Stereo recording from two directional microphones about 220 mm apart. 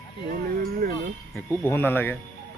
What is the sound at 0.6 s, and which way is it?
Music, 45° right (ahead or behind).